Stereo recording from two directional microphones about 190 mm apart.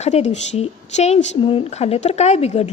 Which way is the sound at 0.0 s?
35° left (ahead or behind).